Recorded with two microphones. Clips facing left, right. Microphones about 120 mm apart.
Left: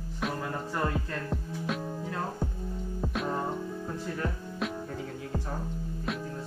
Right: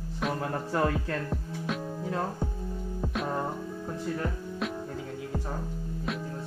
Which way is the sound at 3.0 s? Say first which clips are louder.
Even; centre (ahead or behind).